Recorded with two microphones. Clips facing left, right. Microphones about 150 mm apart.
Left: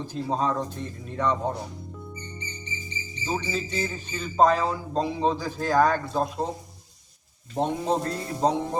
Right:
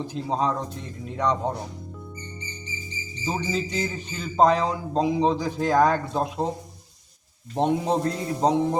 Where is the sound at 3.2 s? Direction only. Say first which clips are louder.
Right 2 dB; 15° right (ahead or behind).